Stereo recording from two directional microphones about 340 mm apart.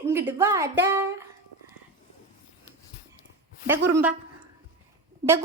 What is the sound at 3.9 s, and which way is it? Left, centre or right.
Speech, centre.